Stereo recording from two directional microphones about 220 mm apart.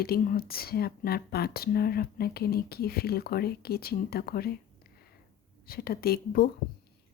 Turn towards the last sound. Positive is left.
turn(degrees=45)  # may be behind; listen again after turning